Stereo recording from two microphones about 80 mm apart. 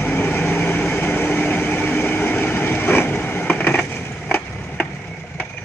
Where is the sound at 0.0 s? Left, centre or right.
Left.